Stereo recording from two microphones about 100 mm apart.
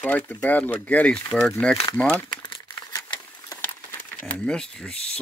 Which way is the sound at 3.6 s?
20° left (ahead or behind).